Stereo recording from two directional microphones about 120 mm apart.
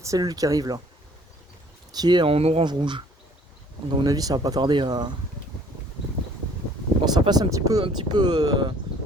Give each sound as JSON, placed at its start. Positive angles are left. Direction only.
{"t": 0.0, "sound": "speech", "side_deg": -30}
{"t": 1.9, "sound": "speech", "side_deg": -35}
{"t": 2.3, "sound": "speech", "side_deg": -55}
{"t": 2.6, "sound": "speech", "side_deg": -40}
{"t": 7.0, "sound": "speech", "side_deg": -35}